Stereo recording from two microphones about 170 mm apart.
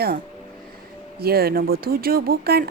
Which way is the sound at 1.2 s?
65° right (ahead or behind).